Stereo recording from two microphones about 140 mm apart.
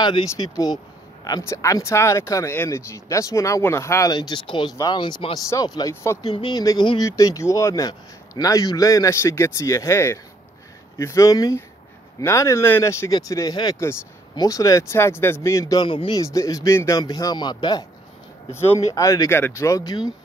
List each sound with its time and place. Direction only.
0.0 s speech: 30° left (ahead or behind)
16.2 s speech: 25° left (ahead or behind)
18.9 s speech: 25° left (ahead or behind)